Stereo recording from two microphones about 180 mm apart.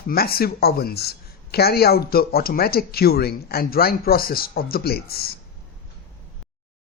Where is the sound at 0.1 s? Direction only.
55° left (ahead or behind).